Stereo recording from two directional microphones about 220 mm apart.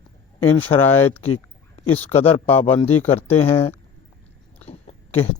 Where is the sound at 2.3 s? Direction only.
25° left (ahead or behind).